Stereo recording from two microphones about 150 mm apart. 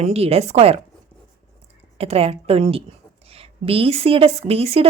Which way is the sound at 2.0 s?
40° right (ahead or behind).